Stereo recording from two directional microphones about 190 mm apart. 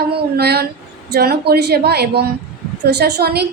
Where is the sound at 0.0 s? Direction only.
55° right (ahead or behind).